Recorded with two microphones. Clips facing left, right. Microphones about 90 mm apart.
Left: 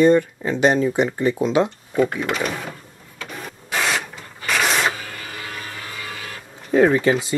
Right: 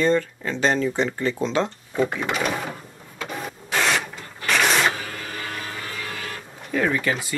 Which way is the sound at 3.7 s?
Centre (ahead or behind).